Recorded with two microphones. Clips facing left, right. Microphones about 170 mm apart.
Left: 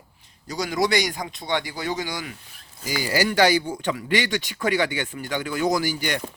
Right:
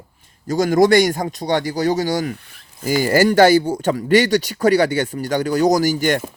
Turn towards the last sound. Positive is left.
turn(degrees=-45)  # may be behind; listen again after turning